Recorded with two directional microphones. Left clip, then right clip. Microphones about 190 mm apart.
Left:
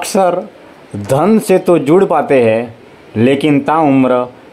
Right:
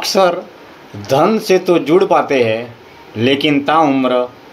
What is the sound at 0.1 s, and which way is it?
Speech, 35° left (ahead or behind).